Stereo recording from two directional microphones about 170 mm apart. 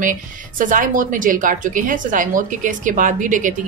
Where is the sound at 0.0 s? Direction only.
50° right (ahead or behind).